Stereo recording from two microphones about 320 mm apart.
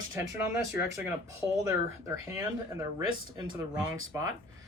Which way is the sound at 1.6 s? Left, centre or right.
Centre.